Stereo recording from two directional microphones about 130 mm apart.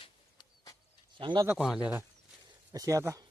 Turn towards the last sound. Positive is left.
turn(degrees=-25)  # may be behind; listen again after turning